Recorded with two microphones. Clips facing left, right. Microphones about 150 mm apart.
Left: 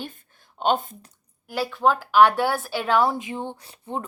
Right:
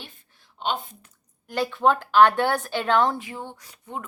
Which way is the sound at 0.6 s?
45° left (ahead or behind).